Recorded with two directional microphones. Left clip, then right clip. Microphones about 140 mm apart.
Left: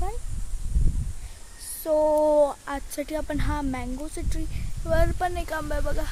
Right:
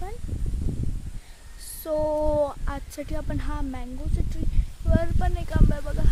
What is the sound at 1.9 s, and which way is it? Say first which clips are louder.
Speech: left 4 dB; 5° right (ahead or behind).